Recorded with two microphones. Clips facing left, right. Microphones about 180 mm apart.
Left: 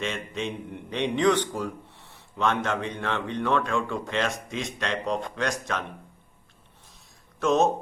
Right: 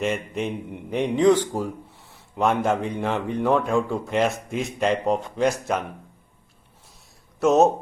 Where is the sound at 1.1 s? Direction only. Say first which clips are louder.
Right 5 dB; 70° left (ahead or behind).